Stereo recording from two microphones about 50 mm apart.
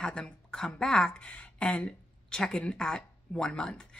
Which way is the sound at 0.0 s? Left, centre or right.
Centre.